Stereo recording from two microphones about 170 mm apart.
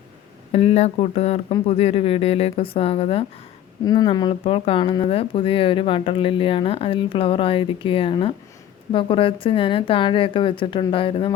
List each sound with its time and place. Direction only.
0.5 s speech: 35° left (ahead or behind)
3.8 s speech: 25° left (ahead or behind)